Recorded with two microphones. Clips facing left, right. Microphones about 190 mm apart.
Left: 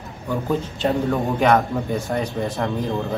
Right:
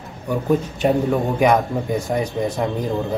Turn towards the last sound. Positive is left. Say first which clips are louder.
# right 2 dB
turn(degrees=-20)  # may be behind; listen again after turning